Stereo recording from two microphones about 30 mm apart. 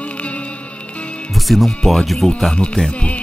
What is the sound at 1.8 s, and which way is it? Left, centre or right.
Speech, centre.